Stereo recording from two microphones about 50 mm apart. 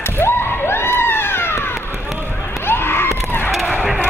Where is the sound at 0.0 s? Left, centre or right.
Left.